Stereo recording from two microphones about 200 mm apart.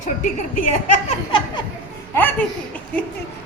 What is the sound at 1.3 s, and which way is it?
Speech, 25° left (ahead or behind).